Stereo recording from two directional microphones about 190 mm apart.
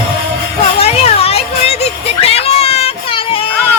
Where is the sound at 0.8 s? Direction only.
30° left (ahead or behind).